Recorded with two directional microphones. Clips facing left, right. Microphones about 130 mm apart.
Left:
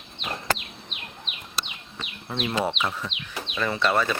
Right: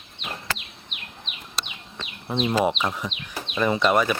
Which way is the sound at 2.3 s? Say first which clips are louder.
Right 5 dB; 15° right (ahead or behind).